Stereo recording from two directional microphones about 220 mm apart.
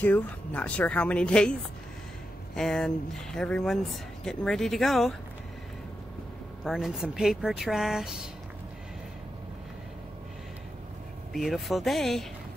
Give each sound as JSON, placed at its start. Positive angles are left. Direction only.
{"t": 0.0, "sound": "speech", "side_deg": 5}
{"t": 2.5, "sound": "speech", "side_deg": 5}
{"t": 6.6, "sound": "speech", "side_deg": 0}
{"t": 11.3, "sound": "speech", "side_deg": 0}